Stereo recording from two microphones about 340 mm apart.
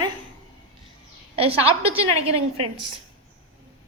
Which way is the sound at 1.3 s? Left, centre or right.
Centre.